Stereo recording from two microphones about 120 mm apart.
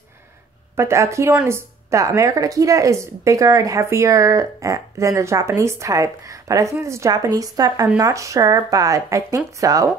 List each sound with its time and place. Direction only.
0.7 s speech: 20° right (ahead or behind)